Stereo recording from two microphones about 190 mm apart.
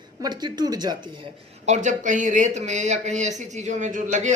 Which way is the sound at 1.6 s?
40° right (ahead or behind).